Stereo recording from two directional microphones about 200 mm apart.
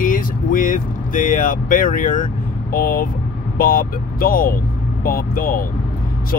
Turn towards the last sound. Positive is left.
turn(degrees=45)  # may be behind; listen again after turning